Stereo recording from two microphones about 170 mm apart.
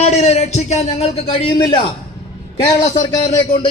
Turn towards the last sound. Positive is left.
turn(degrees=25)  # may be behind; listen again after turning